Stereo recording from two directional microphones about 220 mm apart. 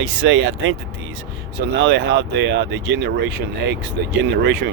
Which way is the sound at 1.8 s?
55° right (ahead or behind).